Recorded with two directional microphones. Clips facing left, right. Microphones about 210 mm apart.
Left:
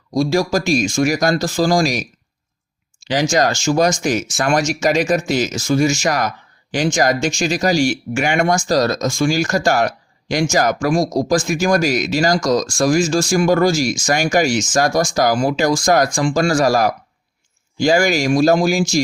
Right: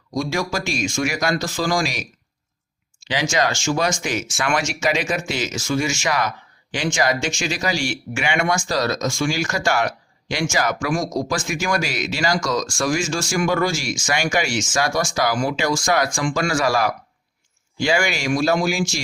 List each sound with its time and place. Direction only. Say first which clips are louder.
0.1 s speech: left 7 dB; 35° left (ahead or behind)
3.1 s speech: left 5 dB; 40° left (ahead or behind)